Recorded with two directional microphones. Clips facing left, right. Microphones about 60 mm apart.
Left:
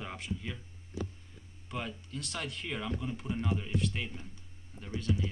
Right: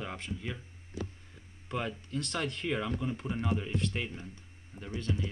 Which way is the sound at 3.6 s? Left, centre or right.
Centre.